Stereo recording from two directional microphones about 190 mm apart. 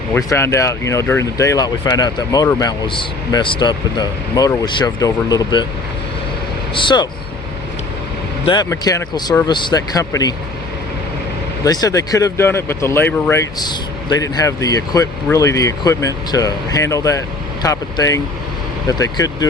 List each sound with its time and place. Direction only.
0.1 s speech: 15° left (ahead or behind)
6.7 s speech: 25° left (ahead or behind)
8.4 s speech: 20° left (ahead or behind)
11.6 s speech: 20° left (ahead or behind)
13.6 s speech: 20° left (ahead or behind)